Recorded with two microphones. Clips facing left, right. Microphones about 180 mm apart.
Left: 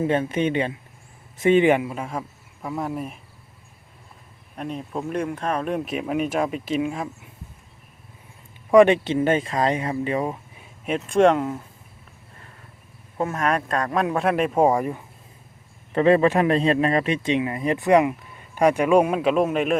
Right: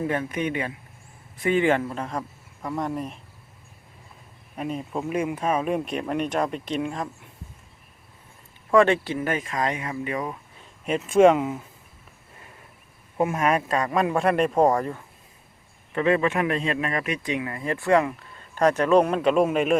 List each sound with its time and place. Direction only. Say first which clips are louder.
0.0 s speech: left 4 dB; 25° left (ahead or behind); by 3.2 s 5° left (ahead or behind)
4.5 s speech: even; centre (ahead or behind)
8.7 s speech: left 4 dB; 15° left (ahead or behind)
10.6 s speech: even; centre (ahead or behind)
13.1 s speech: right 1 dB; 10° right (ahead or behind); by 15.0 s 15° left (ahead or behind)
15.9 s speech: left 5 dB; 35° left (ahead or behind); by 19.7 s centre (ahead or behind)